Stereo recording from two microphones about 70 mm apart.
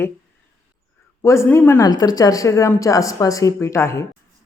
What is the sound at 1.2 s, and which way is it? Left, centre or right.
Speech, left.